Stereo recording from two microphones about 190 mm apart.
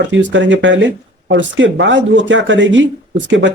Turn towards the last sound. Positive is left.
turn(degrees=-70)  # may be behind; listen again after turning